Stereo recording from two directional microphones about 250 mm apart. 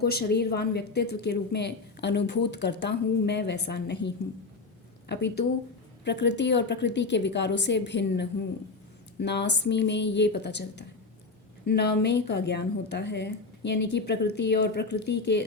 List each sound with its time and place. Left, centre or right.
0.0 s a woman's voice: left